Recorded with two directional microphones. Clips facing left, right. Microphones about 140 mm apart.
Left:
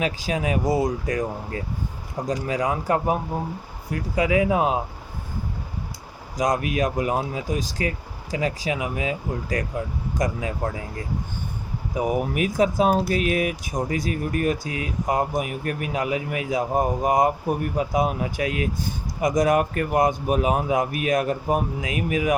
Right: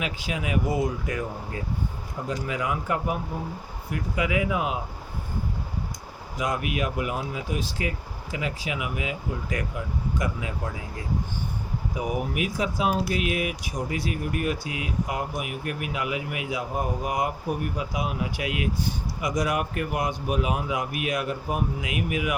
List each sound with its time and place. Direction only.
0.0 s speech: 35° left (ahead or behind)
6.3 s speech: 40° left (ahead or behind)
11.9 s speech: 45° left (ahead or behind)